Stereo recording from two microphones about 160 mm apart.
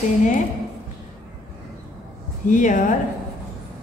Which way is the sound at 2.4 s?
55° left (ahead or behind).